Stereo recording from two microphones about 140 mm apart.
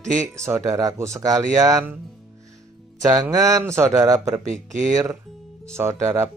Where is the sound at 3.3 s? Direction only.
20° right (ahead or behind).